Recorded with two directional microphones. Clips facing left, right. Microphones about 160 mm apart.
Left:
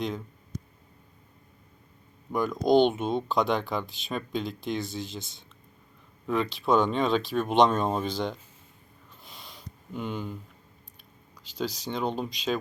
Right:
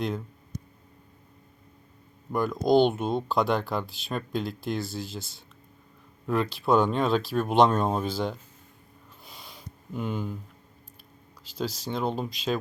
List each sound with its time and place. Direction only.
2.3 s speech: centre (ahead or behind)
9.2 s a sound: centre (ahead or behind)
11.9 s speech: 5° right (ahead or behind)